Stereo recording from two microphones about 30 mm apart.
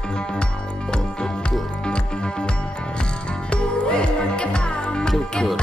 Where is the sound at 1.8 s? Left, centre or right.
Left.